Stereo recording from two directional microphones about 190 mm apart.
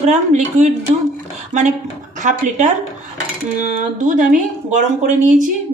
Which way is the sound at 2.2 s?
40° right (ahead or behind).